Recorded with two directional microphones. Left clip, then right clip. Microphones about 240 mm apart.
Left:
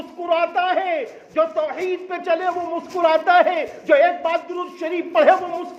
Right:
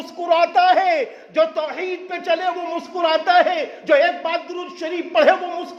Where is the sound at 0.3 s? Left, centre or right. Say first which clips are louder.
Right 4 dB; right.